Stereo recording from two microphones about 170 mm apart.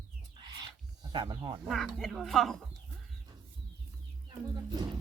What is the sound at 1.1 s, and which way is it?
Cutlery, 30° right (ahead or behind).